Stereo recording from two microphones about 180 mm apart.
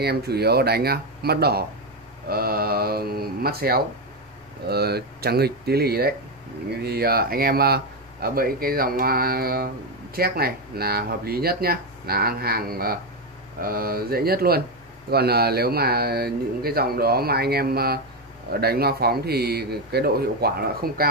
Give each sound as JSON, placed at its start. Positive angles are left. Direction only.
{"t": 0.0, "sound": "speech", "side_deg": -65}